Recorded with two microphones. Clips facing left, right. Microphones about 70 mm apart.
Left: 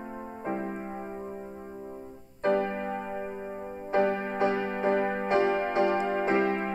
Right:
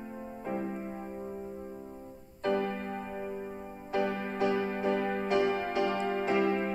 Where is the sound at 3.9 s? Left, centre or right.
Left.